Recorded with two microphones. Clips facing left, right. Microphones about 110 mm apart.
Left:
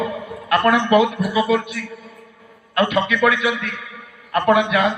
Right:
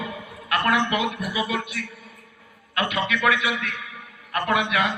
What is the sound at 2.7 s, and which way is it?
A man's voice, 35° left (ahead or behind).